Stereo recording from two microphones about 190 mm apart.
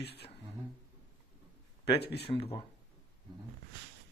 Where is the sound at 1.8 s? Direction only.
60° left (ahead or behind).